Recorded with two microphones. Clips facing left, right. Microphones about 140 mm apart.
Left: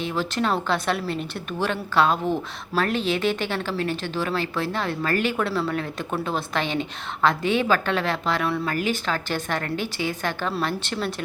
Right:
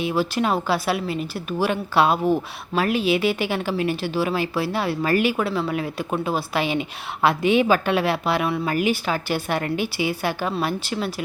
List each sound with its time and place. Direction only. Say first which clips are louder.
0.0 s speech: right 3 dB; 10° right (ahead or behind)